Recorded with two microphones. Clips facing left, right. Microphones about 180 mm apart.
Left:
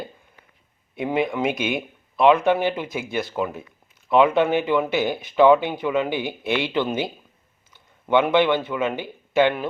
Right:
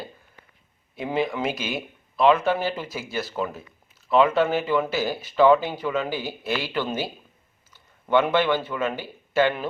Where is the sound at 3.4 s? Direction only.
10° left (ahead or behind).